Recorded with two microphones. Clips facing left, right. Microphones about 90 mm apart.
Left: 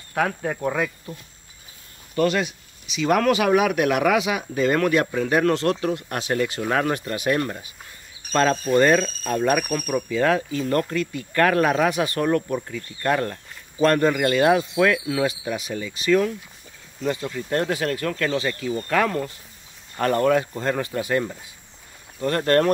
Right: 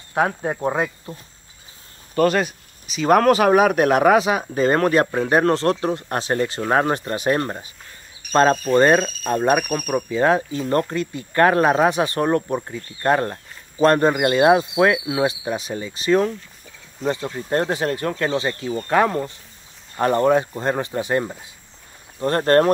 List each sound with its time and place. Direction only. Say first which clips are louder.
0.1 s speech: right 3 dB; 25° right (ahead or behind)
2.1 s speech: right 3 dB; 45° right (ahead or behind)